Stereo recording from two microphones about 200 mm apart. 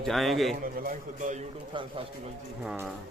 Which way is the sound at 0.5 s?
40° right (ahead or behind).